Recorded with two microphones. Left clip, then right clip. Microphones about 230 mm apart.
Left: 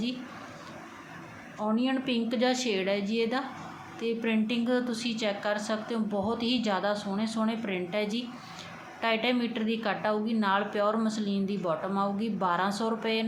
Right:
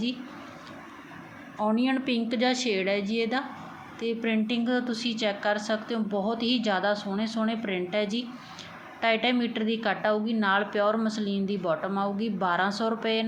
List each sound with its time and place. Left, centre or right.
1.5 s a woman's voice: centre